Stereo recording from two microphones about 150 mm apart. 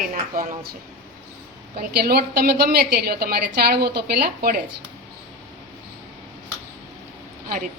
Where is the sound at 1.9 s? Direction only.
90° right.